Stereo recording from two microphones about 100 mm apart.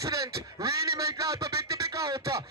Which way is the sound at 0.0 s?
35° right (ahead or behind).